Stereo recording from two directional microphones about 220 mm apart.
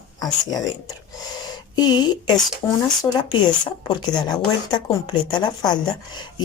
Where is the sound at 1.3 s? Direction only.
20° left (ahead or behind).